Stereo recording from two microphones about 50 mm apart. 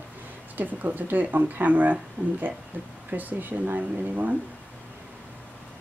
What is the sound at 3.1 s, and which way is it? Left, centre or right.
Speech, right.